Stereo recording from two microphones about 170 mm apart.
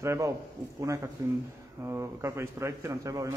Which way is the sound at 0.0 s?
15° right (ahead or behind).